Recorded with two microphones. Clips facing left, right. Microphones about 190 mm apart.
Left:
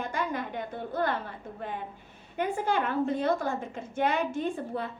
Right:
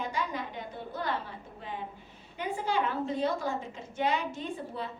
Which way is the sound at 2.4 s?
55° left (ahead or behind).